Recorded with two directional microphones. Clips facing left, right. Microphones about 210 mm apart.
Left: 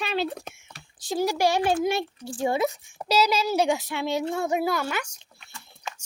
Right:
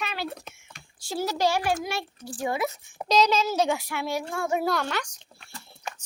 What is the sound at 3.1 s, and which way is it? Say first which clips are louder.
Speech: even; 10° left (ahead or behind).